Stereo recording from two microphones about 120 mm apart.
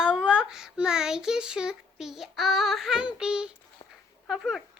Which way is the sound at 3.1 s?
5° right (ahead or behind).